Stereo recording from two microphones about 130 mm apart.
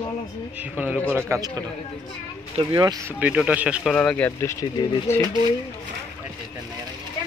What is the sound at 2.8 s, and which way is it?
Speech, 30° right (ahead or behind).